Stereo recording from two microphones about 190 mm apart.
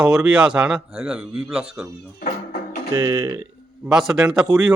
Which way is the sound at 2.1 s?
50° left (ahead or behind).